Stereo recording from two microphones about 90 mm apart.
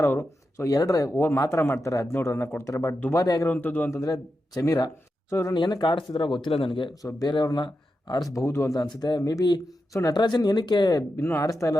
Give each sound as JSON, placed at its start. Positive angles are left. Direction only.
{"t": 0.0, "sound": "a man's voice", "side_deg": 25}
{"t": 0.5, "sound": "speech", "side_deg": 40}
{"t": 3.4, "sound": "a man's voice", "side_deg": 20}
{"t": 4.0, "sound": "speech", "side_deg": 45}
{"t": 5.3, "sound": "speech", "side_deg": 30}
{"t": 5.5, "sound": "speech", "side_deg": 55}
{"t": 6.7, "sound": "speech", "side_deg": 65}
{"t": 7.0, "sound": "speech", "side_deg": 40}
{"t": 8.4, "sound": "speech", "side_deg": 35}
{"t": 9.9, "sound": "speech", "side_deg": 40}
{"t": 10.2, "sound": "speech", "side_deg": 50}
{"t": 11.2, "sound": "a man's voice", "side_deg": 30}